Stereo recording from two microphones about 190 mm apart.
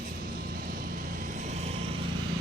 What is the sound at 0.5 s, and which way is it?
Vehicle, 50° right (ahead or behind).